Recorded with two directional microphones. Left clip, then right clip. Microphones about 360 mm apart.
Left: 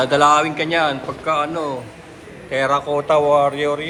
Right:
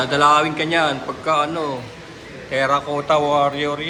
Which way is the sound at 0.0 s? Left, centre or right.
Centre.